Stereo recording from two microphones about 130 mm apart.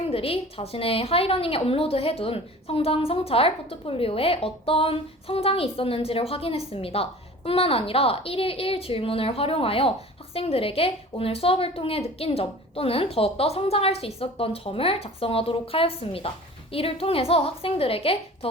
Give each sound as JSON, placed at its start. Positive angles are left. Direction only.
{"t": 0.1, "sound": "a woman's voice", "side_deg": 45}